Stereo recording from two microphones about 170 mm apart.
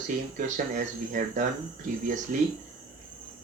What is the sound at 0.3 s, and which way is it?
Speech, 50° right (ahead or behind).